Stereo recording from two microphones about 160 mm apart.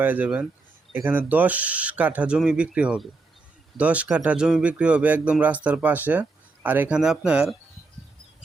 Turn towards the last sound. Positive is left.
turn(degrees=-5)  # may be behind; listen again after turning